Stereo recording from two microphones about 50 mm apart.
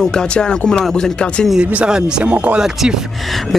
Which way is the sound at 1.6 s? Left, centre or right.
Centre.